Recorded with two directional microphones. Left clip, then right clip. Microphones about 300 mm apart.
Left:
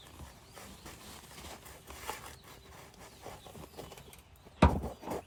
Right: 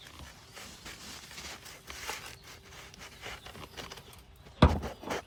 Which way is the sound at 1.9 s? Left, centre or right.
Left.